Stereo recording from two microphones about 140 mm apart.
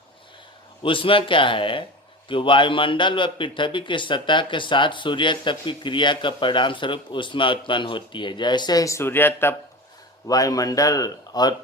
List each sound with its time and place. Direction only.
0.8 s a man's voice: 40° left (ahead or behind)